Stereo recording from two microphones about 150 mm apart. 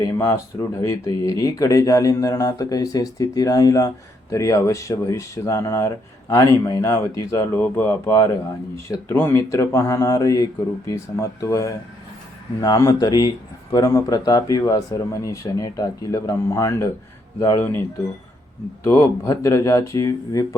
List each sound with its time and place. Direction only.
0.0 s speech: 20° left (ahead or behind)